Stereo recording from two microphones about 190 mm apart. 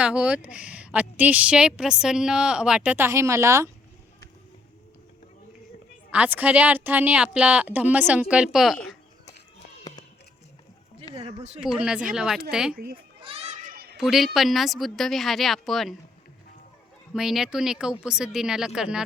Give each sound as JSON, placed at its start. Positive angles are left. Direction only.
{"t": 0.0, "sound": "a woman's voice", "side_deg": -5}
{"t": 6.1, "sound": "a woman's voice", "side_deg": -10}
{"t": 11.2, "sound": "speech", "side_deg": -35}
{"t": 11.6, "sound": "speech", "side_deg": -5}
{"t": 12.7, "sound": "a child's voice", "side_deg": -50}
{"t": 13.1, "sound": "children playing", "side_deg": -30}
{"t": 14.0, "sound": "speech", "side_deg": 0}
{"t": 17.2, "sound": "speech", "side_deg": 0}